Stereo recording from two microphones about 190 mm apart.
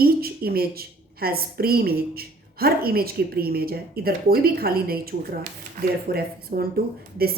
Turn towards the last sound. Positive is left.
turn(degrees=-55)  # may be behind; listen again after turning